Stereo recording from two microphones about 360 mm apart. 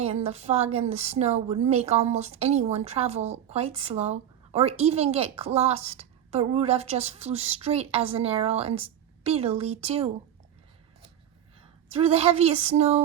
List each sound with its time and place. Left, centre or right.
0.0 s a woman's voice: centre
11.9 s a woman's voice: centre